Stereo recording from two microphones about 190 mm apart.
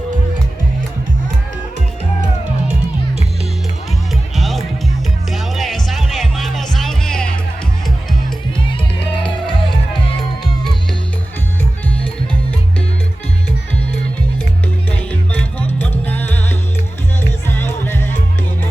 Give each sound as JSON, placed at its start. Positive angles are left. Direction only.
{"t": 4.4, "sound": "music", "side_deg": 0}
{"t": 9.5, "sound": "music", "side_deg": 25}
{"t": 14.8, "sound": "music", "side_deg": 5}